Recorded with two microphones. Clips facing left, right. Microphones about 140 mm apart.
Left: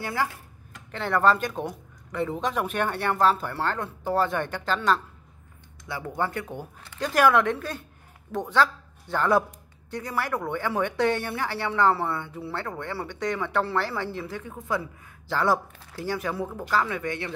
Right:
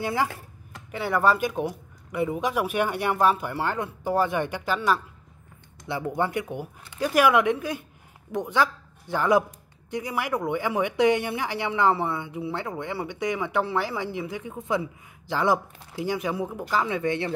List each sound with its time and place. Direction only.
0.0 s speech: 20° right (ahead or behind)
5.9 s speech: 25° right (ahead or behind)